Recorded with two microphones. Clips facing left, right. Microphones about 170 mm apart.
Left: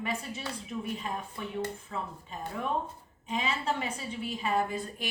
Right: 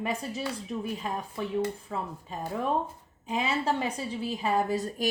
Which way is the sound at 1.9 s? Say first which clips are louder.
Right 3 dB; 40° right (ahead or behind).